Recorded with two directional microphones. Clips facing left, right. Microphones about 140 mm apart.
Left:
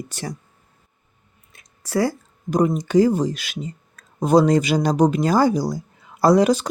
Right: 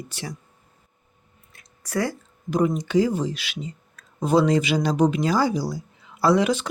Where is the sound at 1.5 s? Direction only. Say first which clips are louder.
Left 4 dB; 25° left (ahead or behind).